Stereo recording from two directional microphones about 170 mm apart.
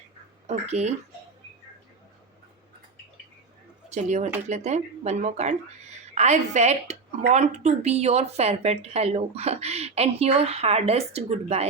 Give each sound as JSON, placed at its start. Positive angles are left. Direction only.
{"t": 0.4, "sound": "a woman's voice", "side_deg": -40}
{"t": 3.8, "sound": "a woman's voice", "side_deg": -40}